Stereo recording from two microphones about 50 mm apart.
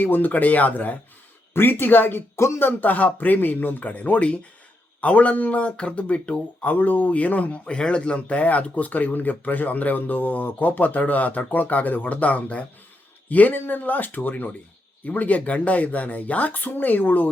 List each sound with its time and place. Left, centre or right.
0.0 s speech: left
1.5 s speech: left
2.3 s speech: left
2.6 s speech: left
6.7 s speech: left